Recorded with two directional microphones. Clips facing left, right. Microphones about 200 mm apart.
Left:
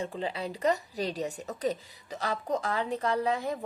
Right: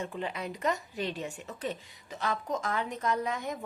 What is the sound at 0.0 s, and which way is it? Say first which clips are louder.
A woman's voice: left 2 dB; 30° left (ahead or behind).